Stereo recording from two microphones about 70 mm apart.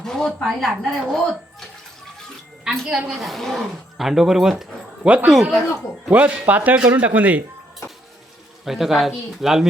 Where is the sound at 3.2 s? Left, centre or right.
Centre.